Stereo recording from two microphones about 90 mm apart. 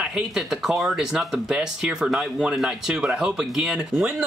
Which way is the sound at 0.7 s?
5° right (ahead or behind).